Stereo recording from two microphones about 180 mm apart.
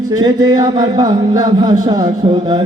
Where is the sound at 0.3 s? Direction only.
20° right (ahead or behind).